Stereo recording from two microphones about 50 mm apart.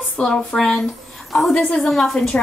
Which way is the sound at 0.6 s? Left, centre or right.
Centre.